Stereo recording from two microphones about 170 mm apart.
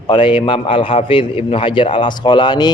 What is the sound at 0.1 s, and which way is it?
A man's voice, 30° left (ahead or behind).